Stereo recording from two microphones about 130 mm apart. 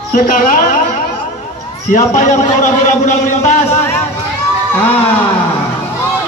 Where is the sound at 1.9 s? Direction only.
80° left.